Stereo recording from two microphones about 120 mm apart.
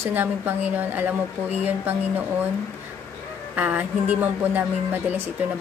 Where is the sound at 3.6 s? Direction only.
15° right (ahead or behind).